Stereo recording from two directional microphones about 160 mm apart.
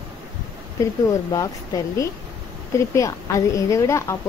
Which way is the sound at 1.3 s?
20° left (ahead or behind).